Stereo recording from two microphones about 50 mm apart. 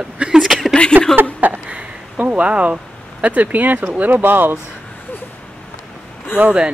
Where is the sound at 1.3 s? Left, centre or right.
Right.